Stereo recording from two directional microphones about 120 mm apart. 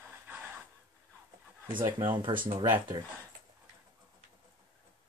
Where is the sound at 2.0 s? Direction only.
45° right (ahead or behind).